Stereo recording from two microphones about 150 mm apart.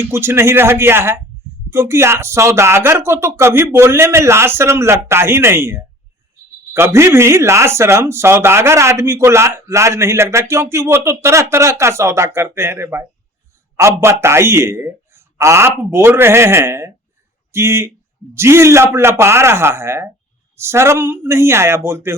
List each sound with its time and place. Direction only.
0.1 s speech: 15° right (ahead or behind)